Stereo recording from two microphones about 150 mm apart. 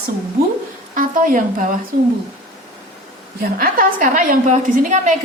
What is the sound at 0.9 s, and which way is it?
Speech, 65° right (ahead or behind).